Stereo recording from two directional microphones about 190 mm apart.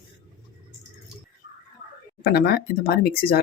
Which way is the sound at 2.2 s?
60° left (ahead or behind).